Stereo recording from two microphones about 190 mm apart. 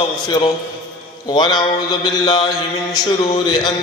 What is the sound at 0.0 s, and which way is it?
Mantra, 30° left (ahead or behind).